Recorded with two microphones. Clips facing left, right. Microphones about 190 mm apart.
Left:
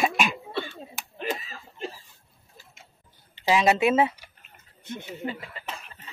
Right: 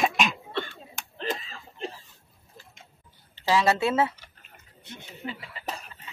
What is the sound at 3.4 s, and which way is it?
Speech, 15° left (ahead or behind).